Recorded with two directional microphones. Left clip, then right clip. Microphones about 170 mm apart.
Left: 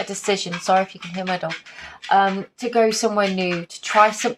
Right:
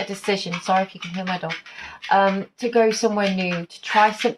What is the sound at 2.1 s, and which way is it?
Speech, 25° left (ahead or behind).